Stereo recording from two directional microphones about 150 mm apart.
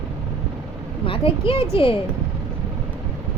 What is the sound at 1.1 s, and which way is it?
Speech, 35° left (ahead or behind).